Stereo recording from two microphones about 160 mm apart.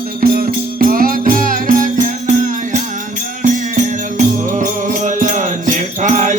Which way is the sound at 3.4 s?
50° right (ahead or behind).